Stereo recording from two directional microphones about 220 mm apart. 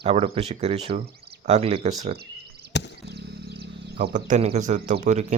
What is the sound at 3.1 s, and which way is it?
Music, 50° right (ahead or behind).